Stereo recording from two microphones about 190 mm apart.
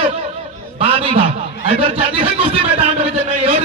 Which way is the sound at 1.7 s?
30° right (ahead or behind).